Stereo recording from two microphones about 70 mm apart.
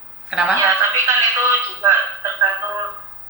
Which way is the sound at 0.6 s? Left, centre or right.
Right.